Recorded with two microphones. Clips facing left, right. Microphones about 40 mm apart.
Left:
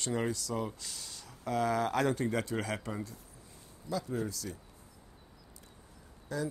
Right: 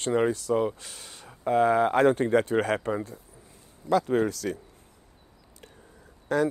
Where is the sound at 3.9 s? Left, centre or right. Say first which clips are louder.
Right 12 dB; right.